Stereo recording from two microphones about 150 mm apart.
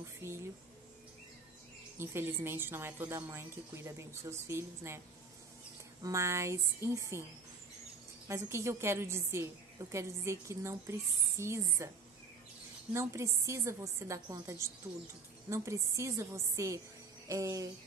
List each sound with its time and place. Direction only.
0.0 s a sound: 15° right (ahead or behind)
2.0 s a woman's voice: 15° right (ahead or behind)
6.0 s a woman's voice: 20° right (ahead or behind)
8.3 s a woman's voice: 20° right (ahead or behind)
12.9 s a woman's voice: 20° right (ahead or behind)